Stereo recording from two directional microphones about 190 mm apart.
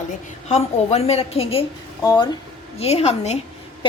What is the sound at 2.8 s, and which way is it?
Speech, 30° left (ahead or behind).